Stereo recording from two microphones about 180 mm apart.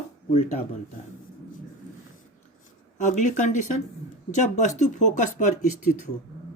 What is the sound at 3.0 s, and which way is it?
Speech, 45° left (ahead or behind).